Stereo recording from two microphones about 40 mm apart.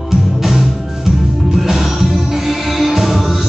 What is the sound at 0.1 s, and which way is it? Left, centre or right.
Music, centre.